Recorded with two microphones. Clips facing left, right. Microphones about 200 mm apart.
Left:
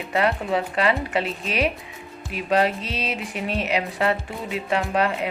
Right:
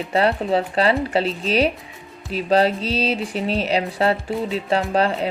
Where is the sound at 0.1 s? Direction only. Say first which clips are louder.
Right 3 dB; 30° right (ahead or behind).